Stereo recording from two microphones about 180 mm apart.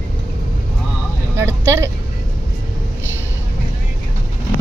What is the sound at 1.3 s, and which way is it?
Speech, 15° right (ahead or behind).